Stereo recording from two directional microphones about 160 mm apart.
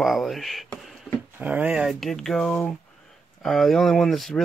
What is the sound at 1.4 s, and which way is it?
Speech, 10° right (ahead or behind).